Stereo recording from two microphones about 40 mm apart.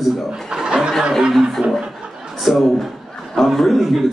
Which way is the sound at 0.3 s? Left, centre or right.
Centre.